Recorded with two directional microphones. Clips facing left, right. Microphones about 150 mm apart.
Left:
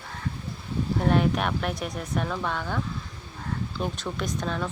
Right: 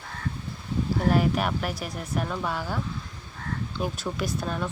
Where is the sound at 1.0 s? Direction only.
5° right (ahead or behind).